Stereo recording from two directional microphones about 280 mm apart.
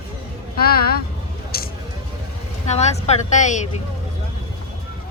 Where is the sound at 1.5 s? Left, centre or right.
Left.